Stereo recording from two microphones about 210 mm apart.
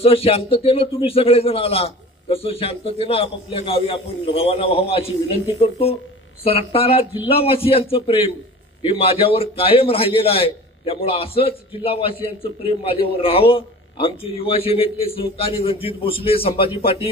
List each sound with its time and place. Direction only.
0.0 s a man's voice: 25° left (ahead or behind)